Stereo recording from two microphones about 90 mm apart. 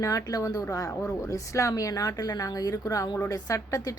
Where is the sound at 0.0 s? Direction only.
40° left (ahead or behind).